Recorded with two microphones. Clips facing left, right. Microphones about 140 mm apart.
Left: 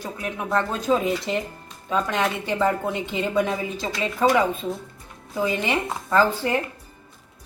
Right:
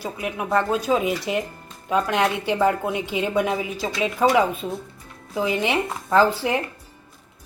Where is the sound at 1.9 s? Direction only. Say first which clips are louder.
Right 2 dB; 15° right (ahead or behind).